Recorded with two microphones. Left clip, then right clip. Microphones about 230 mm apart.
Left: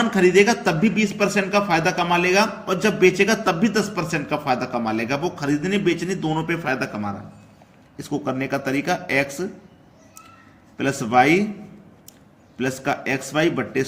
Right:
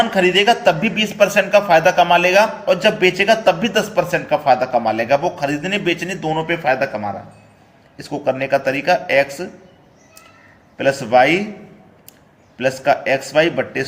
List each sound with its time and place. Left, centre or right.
0.0 s a man's voice: left
10.8 s speech: left
12.6 s speech: left